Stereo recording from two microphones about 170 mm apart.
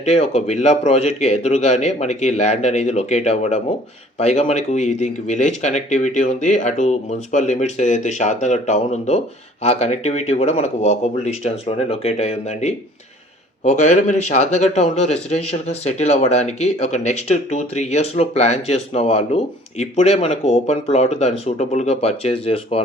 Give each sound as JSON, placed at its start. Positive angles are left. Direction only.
{"t": 0.0, "sound": "speech", "side_deg": 40}